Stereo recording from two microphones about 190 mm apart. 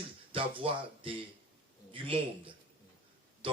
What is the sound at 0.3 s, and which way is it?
Speech, 25° right (ahead or behind).